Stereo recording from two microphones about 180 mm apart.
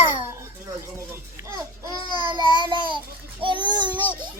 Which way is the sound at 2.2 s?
25° right (ahead or behind).